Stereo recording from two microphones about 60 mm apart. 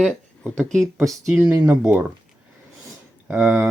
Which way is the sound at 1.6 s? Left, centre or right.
Right.